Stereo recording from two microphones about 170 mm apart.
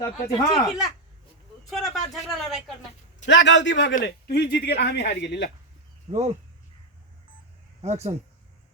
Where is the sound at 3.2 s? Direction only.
90° left.